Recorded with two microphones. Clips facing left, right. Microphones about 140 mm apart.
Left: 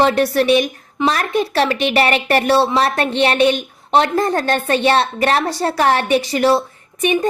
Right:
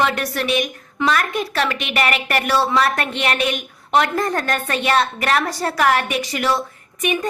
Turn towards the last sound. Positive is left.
turn(degrees=30)  # may be behind; listen again after turning